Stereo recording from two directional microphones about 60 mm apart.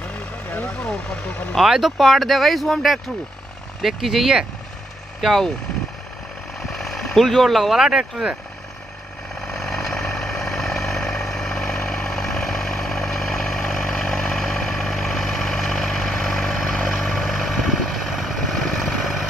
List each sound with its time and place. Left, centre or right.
0.0 s vehicle: left
0.7 s speech: centre
1.6 s speech: centre
5.2 s speech: centre
6.6 s vehicle: centre
7.8 s speech: centre
9.4 s vehicle: centre